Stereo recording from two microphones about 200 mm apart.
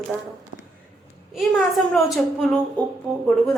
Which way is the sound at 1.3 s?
Centre (ahead or behind).